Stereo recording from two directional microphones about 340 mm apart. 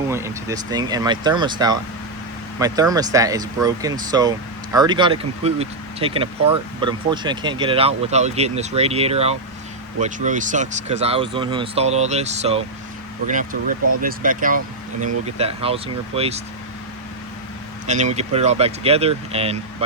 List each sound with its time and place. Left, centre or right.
0.1 s speech: centre
17.8 s speech: centre